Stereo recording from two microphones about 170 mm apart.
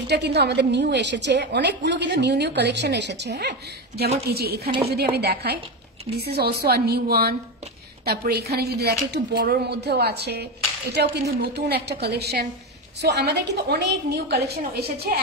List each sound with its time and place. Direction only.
0.0 s a woman's voice: 75° right (ahead or behind)